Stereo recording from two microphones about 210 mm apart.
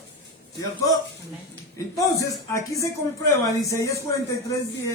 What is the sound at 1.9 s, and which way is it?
Speech, 15° left (ahead or behind).